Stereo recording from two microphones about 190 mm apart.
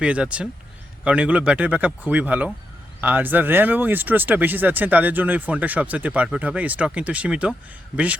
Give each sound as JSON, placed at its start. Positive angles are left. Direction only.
{"t": 0.0, "sound": "speech", "side_deg": -5}